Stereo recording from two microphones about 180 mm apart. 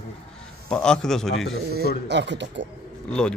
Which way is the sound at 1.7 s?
65° right (ahead or behind).